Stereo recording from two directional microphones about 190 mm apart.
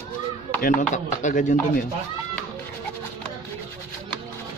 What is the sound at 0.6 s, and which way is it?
Speech, 40° left (ahead or behind).